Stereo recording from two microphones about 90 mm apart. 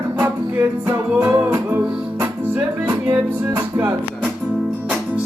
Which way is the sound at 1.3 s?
25° right (ahead or behind).